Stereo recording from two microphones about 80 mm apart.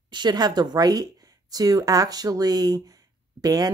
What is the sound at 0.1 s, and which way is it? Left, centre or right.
A woman's voice, right.